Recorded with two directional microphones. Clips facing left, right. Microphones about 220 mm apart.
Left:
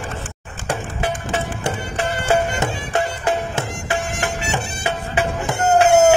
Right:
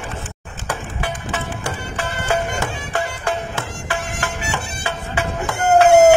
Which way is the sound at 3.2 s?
20° left (ahead or behind).